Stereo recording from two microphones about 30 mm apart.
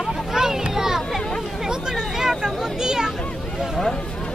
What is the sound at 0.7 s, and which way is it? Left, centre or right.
Speech, centre.